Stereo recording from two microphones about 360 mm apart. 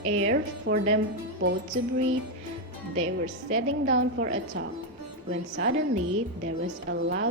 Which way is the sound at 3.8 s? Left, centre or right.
Right.